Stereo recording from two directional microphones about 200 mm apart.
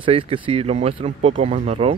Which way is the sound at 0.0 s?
30° right (ahead or behind).